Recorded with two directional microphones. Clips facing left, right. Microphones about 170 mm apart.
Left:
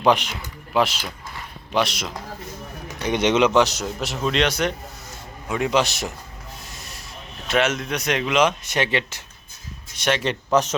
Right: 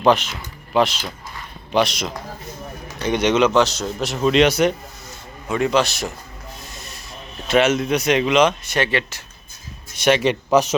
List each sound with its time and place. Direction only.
0.0 s speech: 15° left (ahead or behind)
2.8 s a sound: 10° left (ahead or behind)
3.2 s a man's voice: 20° left (ahead or behind)
4.0 s speech: centre (ahead or behind)
5.5 s a man's voice: 10° left (ahead or behind)
7.4 s speech: centre (ahead or behind)
8.6 s speech: 20° left (ahead or behind)
10.0 s speech: 10° right (ahead or behind)